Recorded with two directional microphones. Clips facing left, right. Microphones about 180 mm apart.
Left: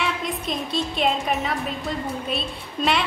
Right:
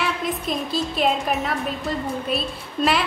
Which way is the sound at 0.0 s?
Centre (ahead or behind).